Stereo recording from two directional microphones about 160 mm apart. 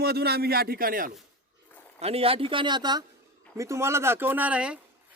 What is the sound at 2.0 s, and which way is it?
Speech, 40° right (ahead or behind).